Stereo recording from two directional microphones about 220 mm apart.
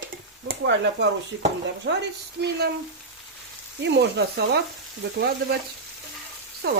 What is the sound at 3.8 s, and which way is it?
Speech, 50° right (ahead or behind).